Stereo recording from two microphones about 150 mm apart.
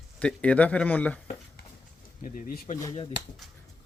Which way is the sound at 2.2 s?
60° left (ahead or behind).